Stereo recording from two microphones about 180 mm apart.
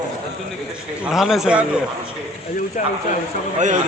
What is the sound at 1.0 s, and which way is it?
Speech, centre (ahead or behind).